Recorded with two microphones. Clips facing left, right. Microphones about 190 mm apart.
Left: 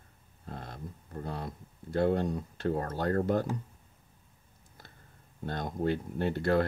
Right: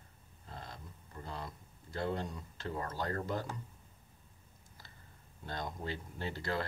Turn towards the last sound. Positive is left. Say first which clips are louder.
# left 10 dB
turn(degrees=55)  # may be behind; listen again after turning